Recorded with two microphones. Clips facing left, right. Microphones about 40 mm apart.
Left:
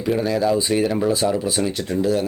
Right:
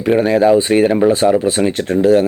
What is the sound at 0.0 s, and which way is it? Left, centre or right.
Speech, right.